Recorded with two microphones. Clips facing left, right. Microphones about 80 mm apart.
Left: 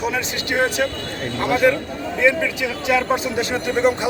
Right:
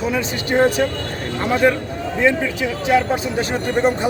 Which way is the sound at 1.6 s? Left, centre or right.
Right.